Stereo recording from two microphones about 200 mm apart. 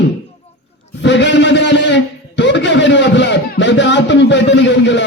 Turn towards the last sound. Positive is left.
turn(degrees=60)  # may be behind; listen again after turning